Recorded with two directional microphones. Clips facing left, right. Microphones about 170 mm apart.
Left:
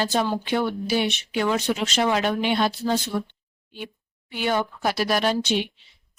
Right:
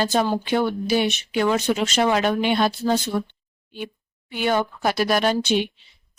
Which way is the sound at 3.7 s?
50° right (ahead or behind).